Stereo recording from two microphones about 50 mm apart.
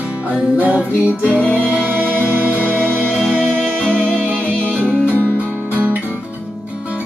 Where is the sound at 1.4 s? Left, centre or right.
Left.